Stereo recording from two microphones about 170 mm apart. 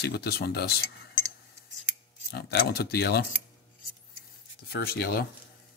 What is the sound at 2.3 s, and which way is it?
Speech, 65° left (ahead or behind).